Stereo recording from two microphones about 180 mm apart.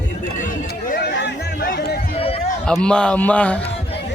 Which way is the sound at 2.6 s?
5° left (ahead or behind).